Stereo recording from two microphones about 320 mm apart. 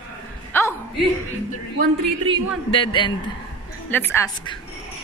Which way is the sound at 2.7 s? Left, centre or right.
Centre.